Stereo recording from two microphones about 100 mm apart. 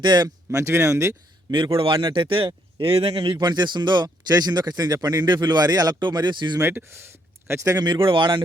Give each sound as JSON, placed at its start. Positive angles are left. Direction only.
{"t": 0.0, "sound": "speech", "side_deg": -50}
{"t": 0.5, "sound": "speech", "side_deg": -30}
{"t": 1.5, "sound": "a man's voice", "side_deg": -50}
{"t": 6.6, "sound": "speech", "side_deg": -25}
{"t": 7.8, "sound": "speech", "side_deg": -50}